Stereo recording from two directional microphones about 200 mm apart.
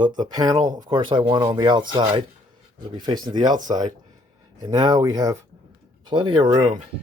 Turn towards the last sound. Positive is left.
turn(degrees=-20)  # may be behind; listen again after turning